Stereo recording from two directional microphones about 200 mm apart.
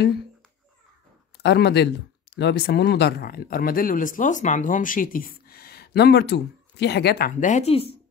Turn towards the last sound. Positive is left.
turn(degrees=30)  # may be behind; listen again after turning